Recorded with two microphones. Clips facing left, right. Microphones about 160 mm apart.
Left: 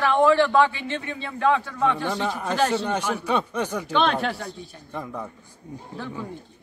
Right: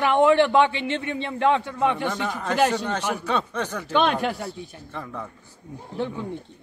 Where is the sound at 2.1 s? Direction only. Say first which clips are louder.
Left 1 dB; 15° left (ahead or behind).